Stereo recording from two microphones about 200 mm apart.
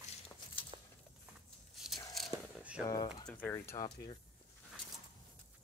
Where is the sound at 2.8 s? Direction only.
20° left (ahead or behind).